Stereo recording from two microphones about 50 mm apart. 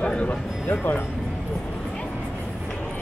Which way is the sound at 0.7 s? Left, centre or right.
Left.